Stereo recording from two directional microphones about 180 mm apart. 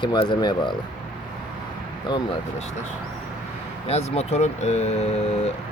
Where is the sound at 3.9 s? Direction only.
35° left (ahead or behind).